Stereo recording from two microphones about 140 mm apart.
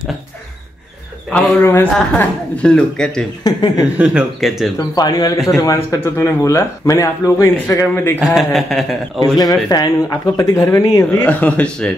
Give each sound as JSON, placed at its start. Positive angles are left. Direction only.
{"t": 1.6, "sound": "speech", "side_deg": 15}
{"t": 3.4, "sound": "speech", "side_deg": 30}
{"t": 4.0, "sound": "a man's voice", "side_deg": -5}
{"t": 4.7, "sound": "speech", "side_deg": 30}
{"t": 8.2, "sound": "a man's voice", "side_deg": 0}
{"t": 9.2, "sound": "speech", "side_deg": 25}
{"t": 11.2, "sound": "speech", "side_deg": 10}